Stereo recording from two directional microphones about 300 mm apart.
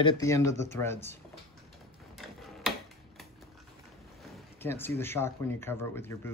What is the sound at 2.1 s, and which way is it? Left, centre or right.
Tick-tock, centre.